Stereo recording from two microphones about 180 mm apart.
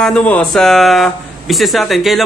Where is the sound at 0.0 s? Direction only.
5° left (ahead or behind).